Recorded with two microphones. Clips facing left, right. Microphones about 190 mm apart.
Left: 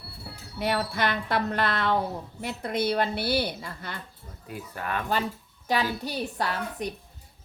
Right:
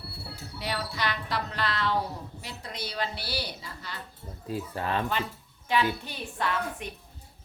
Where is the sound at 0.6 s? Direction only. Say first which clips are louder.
Left 6 dB; 55° left (ahead or behind).